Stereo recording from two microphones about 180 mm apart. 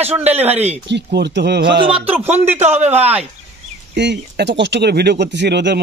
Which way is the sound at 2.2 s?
10° right (ahead or behind).